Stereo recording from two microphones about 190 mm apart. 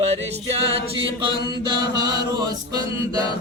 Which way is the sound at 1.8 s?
20° right (ahead or behind).